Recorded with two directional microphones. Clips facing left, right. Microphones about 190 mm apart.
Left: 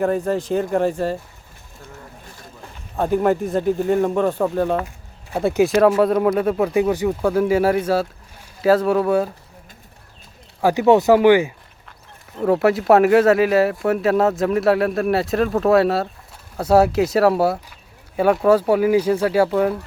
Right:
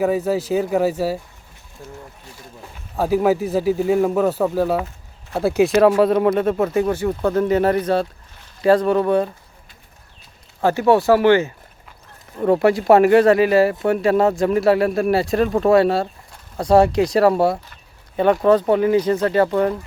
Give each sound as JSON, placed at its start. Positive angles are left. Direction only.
{"t": 0.0, "sound": "speech", "side_deg": -5}
{"t": 2.9, "sound": "speech", "side_deg": -5}
{"t": 6.7, "sound": "speech", "side_deg": 15}
{"t": 10.6, "sound": "speech", "side_deg": 15}
{"t": 12.5, "sound": "speech", "side_deg": 0}